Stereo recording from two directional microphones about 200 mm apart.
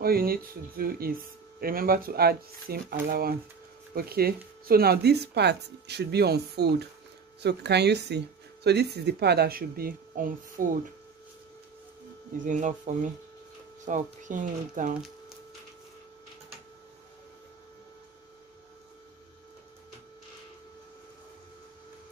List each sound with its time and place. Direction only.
0.0 s speech: 50° right (ahead or behind)
12.4 s speech: 40° right (ahead or behind)